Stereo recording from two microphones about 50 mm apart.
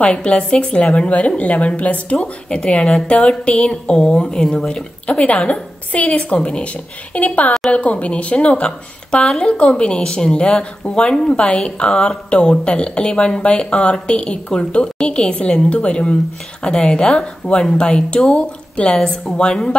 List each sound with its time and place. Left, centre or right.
0.0 s a woman's voice: centre